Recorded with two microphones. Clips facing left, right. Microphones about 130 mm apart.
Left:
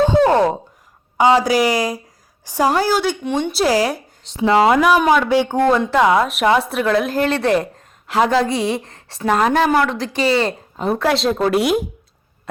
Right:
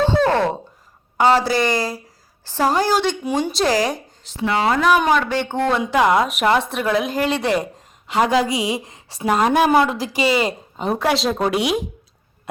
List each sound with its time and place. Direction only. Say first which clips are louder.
0.1 s a sound: left 4 dB; 15° left (ahead or behind)
1.2 s a woman's voice: left 2 dB; 15° left (ahead or behind)
4.4 s speech: left 6 dB; 30° left (ahead or behind)
4.7 s speech: left 3 dB; 10° left (ahead or behind)
5.7 s a woman's voice: even; 5° right (ahead or behind)
11.0 s a woman's voice: left 1 dB; centre (ahead or behind)
11.3 s speech: left 3 dB; 15° right (ahead or behind)
11.5 s a woman's voice: left 4 dB; centre (ahead or behind)